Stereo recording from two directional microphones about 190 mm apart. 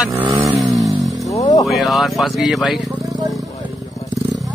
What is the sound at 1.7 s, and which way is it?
Speech, centre (ahead or behind).